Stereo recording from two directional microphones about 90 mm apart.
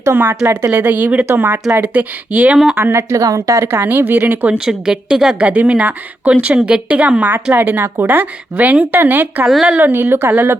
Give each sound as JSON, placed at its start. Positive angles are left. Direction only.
{"t": 0.0, "sound": "a woman's voice", "side_deg": -25}
{"t": 0.7, "sound": "a woman's voice", "side_deg": -20}
{"t": 2.7, "sound": "speech", "side_deg": -25}
{"t": 4.5, "sound": "a woman's voice", "side_deg": -10}
{"t": 9.5, "sound": "speech", "side_deg": 0}
{"t": 9.7, "sound": "speech", "side_deg": -25}